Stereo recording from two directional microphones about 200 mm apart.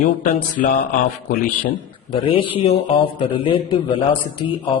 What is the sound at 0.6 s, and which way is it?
Speech, 40° left (ahead or behind).